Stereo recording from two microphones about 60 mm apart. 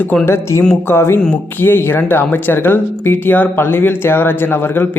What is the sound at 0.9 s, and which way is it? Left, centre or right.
Speech, left.